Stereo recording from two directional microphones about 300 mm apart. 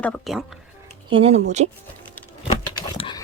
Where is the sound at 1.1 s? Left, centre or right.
Right.